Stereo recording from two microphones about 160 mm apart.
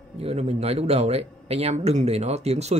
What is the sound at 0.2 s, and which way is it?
Speech, 40° right (ahead or behind).